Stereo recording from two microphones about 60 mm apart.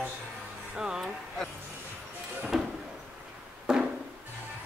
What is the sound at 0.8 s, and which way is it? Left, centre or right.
Speech, centre.